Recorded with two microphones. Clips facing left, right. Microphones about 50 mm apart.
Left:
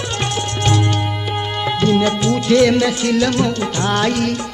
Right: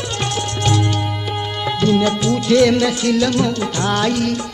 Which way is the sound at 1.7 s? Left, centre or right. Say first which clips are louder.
Even; left.